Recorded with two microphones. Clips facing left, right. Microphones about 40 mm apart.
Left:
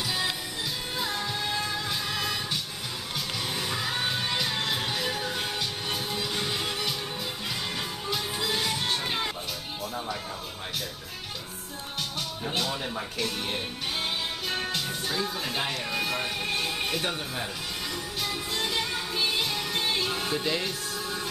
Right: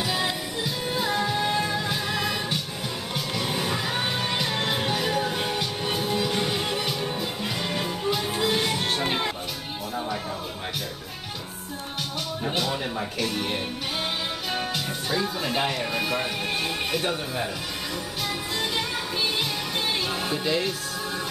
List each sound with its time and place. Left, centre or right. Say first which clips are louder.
0.0 s music: right 3 dB; centre
12.4 s speech: right 3 dB; centre
18.6 s music: right 1 dB; centre
19.9 s speech: right 1 dB; centre